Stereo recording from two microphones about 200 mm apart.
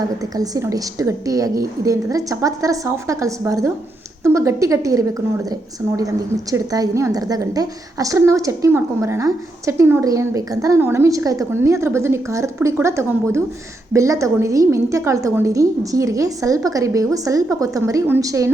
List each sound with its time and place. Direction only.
0.2 s a woman's voice: 20° right (ahead or behind)